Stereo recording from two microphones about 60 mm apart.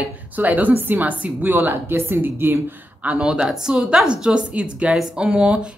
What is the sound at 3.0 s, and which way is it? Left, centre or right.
Speech, centre.